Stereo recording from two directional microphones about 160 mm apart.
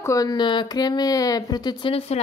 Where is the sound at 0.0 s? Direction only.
20° left (ahead or behind).